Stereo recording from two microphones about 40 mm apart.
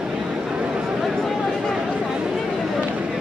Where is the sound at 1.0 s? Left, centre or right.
Centre.